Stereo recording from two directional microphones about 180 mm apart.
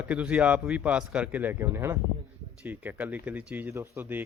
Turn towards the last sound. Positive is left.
turn(degrees=-10)  # may be behind; listen again after turning